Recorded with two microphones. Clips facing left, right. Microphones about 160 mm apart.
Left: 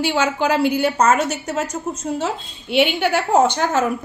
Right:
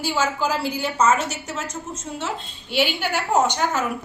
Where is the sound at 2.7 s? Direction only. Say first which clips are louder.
Left 6 dB; 60° left (ahead or behind).